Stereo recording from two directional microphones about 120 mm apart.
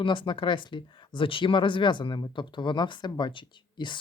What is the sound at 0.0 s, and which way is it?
Speech, 45° left (ahead or behind).